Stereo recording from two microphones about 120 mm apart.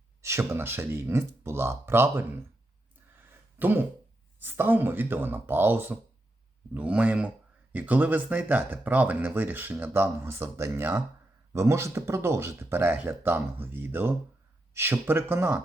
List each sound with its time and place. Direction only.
0.2 s speech: 25° right (ahead or behind)
3.6 s speech: 15° right (ahead or behind)